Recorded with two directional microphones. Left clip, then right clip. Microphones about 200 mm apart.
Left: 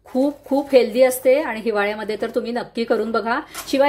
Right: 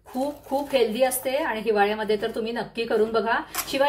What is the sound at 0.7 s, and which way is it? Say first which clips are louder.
A woman's voice: left 8 dB; 45° left (ahead or behind).